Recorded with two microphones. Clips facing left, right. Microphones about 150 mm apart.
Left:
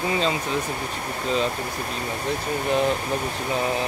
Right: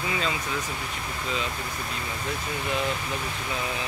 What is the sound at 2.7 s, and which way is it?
Speech, 40° left (ahead or behind).